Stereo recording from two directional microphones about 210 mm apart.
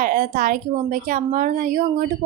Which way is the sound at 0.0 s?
40° right (ahead or behind).